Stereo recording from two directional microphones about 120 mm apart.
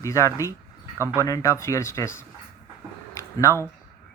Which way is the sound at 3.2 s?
25° left (ahead or behind).